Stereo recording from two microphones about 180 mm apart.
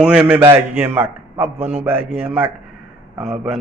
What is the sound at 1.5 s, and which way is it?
Speech, 35° right (ahead or behind).